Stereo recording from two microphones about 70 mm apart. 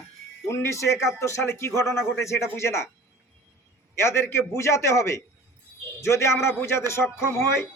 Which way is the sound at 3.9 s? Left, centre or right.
Left.